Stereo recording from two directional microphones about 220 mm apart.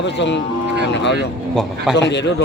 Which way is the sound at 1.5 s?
Centre (ahead or behind).